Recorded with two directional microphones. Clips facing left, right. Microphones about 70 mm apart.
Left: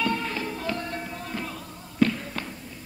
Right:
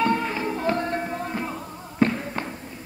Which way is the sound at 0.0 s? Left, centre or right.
Right.